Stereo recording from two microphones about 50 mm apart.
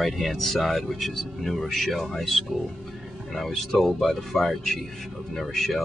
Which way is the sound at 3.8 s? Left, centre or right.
Centre.